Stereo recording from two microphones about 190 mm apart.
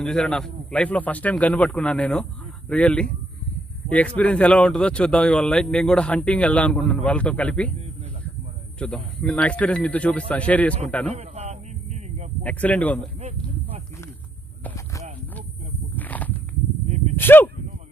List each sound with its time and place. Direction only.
0.0 s a man's voice: 5° left (ahead or behind)
8.7 s speech: 5° left (ahead or behind)
11.1 s a man's voice: 35° right (ahead or behind)
12.4 s speech: 10° left (ahead or behind)
14.6 s clip-clop: 10° left (ahead or behind)
16.0 s walk: 10° left (ahead or behind)
16.8 s whip: 35° right (ahead or behind)
17.1 s speech: 10° left (ahead or behind)